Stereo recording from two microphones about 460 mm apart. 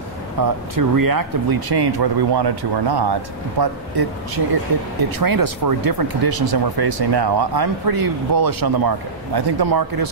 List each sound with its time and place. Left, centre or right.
0.4 s speech: right
5.2 s speech: right